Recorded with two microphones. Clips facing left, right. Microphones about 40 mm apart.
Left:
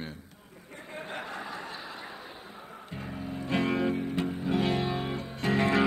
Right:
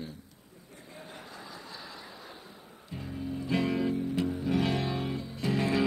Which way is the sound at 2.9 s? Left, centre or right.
Left.